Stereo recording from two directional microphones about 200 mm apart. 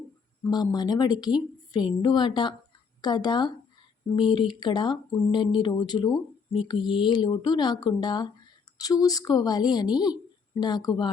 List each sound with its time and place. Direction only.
0.4 s a woman's voice: 20° left (ahead or behind)